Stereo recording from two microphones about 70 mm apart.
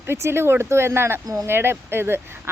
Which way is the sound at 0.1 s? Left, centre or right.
Right.